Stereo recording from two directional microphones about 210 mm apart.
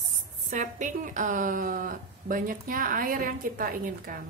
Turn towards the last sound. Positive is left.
turn(degrees=-40)  # may be behind; listen again after turning